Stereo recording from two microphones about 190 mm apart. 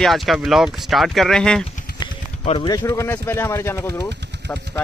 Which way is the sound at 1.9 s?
50° left (ahead or behind).